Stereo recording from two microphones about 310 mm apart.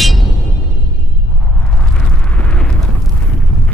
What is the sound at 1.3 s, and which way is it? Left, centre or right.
Eruption, centre.